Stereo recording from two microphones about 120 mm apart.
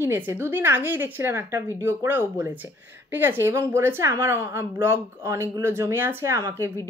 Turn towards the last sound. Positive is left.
turn(degrees=-25)  # may be behind; listen again after turning